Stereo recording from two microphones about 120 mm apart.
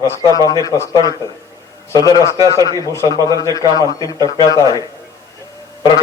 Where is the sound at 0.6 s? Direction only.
30° left (ahead or behind).